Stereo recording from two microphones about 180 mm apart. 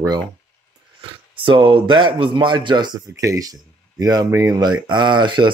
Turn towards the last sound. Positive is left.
turn(degrees=-25)  # may be behind; listen again after turning